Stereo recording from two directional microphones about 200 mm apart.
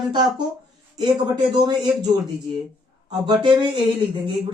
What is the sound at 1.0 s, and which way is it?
Speech, 20° right (ahead or behind).